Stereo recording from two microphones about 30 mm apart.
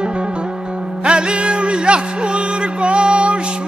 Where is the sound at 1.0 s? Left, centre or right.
Right.